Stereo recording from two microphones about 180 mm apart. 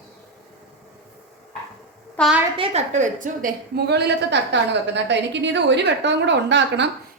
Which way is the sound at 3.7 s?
70° right (ahead or behind).